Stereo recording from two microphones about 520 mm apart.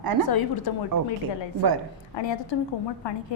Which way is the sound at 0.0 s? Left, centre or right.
Right.